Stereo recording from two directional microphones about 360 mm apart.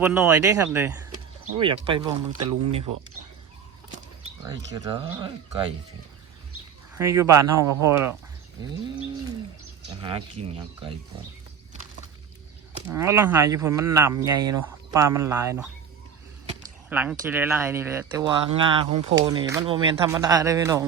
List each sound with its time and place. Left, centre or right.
0.0 s speech: centre
4.4 s speech: centre
6.9 s speech: centre
7.4 s speech: right
7.9 s speech: centre
10.0 s speech: centre
12.9 s speech: centre
16.9 s speech: centre